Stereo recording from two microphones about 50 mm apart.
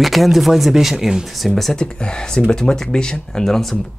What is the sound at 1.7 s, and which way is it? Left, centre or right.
Speech, centre.